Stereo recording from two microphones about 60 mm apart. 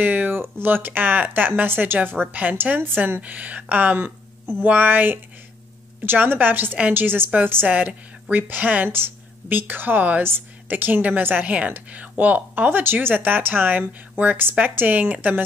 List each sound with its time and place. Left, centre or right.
0.0 s speech: right
7.6 s speech: right